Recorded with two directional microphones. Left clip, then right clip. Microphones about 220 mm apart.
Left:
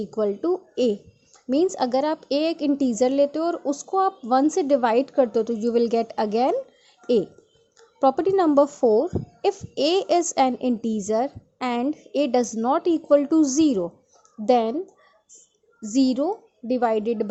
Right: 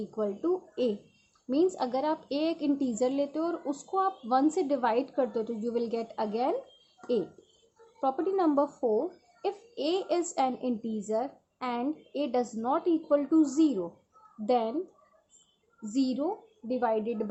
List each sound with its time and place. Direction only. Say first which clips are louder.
0.1 s a woman's voice: left 7 dB; 30° left (ahead or behind)
8.0 s a woman's voice: left 9 dB; 35° left (ahead or behind)
15.9 s a woman's voice: left 8 dB; 30° left (ahead or behind)